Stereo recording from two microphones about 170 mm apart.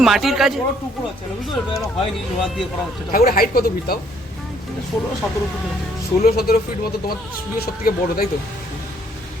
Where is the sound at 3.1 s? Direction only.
60° left (ahead or behind).